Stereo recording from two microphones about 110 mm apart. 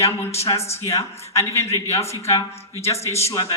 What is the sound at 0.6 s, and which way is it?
Speech, 70° left (ahead or behind).